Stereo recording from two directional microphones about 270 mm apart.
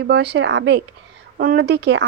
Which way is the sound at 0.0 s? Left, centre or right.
Right.